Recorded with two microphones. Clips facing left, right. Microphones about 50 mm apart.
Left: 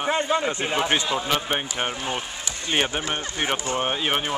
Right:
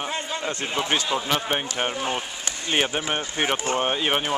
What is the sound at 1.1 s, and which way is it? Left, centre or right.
Speech, centre.